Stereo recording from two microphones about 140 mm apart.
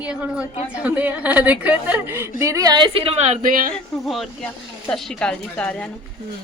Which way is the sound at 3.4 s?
90° right.